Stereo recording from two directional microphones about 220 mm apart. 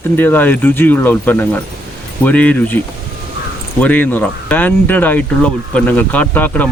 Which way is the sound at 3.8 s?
10° left (ahead or behind).